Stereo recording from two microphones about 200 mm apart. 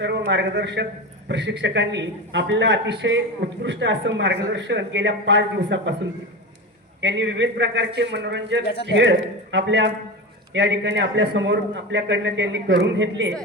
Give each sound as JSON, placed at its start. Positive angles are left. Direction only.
{"t": 0.0, "sound": "a man's voice", "side_deg": -60}
{"t": 7.0, "sound": "a man's voice", "side_deg": -60}
{"t": 8.6, "sound": "speech", "side_deg": 55}
{"t": 8.9, "sound": "a man's voice", "side_deg": -60}